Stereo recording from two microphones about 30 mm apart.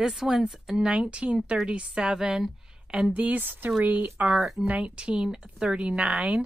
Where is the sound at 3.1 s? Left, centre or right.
Right.